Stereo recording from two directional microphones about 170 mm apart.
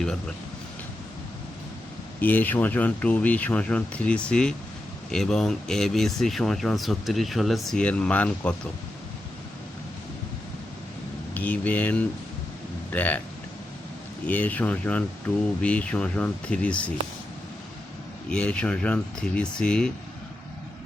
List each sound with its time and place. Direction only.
0.0 s speech: 5° left (ahead or behind)
2.2 s speech: 10° left (ahead or behind)
11.3 s speech: 10° left (ahead or behind)
14.3 s speech: 10° left (ahead or behind)
18.3 s speech: 5° left (ahead or behind)